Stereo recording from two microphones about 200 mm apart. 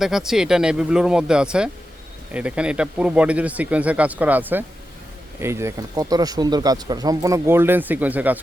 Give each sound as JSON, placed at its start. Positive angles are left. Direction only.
{"t": 0.0, "sound": "speech", "side_deg": 0}